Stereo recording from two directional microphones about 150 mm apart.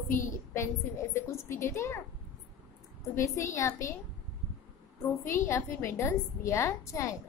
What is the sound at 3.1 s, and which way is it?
Speech, 20° left (ahead or behind).